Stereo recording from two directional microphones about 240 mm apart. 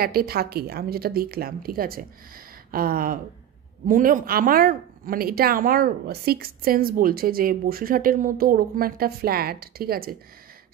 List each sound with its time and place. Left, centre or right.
0.0 s speech: right